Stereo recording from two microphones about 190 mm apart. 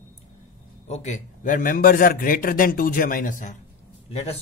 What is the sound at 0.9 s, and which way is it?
Speech, 35° left (ahead or behind).